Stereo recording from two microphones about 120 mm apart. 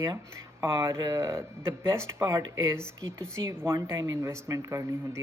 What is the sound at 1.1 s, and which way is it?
Speech, 25° right (ahead or behind).